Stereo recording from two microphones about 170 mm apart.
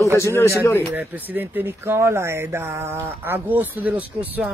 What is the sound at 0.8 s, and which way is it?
Speech, 10° right (ahead or behind).